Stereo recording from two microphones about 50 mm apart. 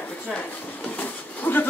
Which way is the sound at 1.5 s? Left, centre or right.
Left.